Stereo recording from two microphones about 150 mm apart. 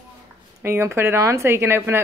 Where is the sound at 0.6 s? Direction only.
15° right (ahead or behind).